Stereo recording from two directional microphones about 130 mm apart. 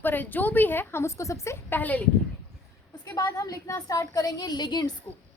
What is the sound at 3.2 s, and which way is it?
A woman's voice, 25° left (ahead or behind).